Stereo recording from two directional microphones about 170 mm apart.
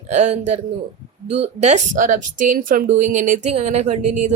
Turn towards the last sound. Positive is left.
turn(degrees=-45)  # may be behind; listen again after turning